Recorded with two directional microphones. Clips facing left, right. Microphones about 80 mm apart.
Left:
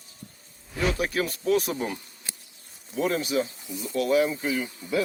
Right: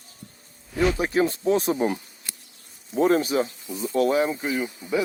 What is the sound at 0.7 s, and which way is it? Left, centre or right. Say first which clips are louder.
Speech: right 5 dB; right.